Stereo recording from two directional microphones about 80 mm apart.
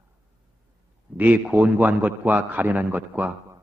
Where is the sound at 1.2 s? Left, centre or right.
Centre.